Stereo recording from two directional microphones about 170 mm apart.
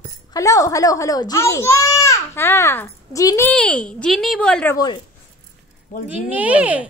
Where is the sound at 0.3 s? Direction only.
20° left (ahead or behind).